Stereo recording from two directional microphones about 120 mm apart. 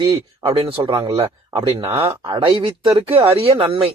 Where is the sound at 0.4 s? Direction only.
55° right (ahead or behind).